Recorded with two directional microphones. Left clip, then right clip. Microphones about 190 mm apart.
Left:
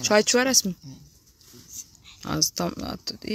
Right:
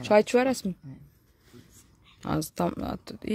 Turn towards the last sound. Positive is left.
turn(degrees=-10)  # may be behind; listen again after turning